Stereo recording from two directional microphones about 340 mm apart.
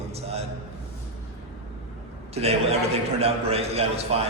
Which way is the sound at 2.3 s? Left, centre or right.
Centre.